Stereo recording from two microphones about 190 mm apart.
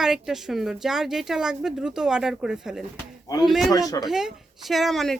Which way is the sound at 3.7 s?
20° left (ahead or behind).